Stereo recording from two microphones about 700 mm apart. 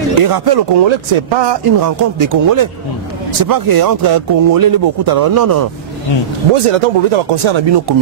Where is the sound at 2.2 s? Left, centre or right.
Right.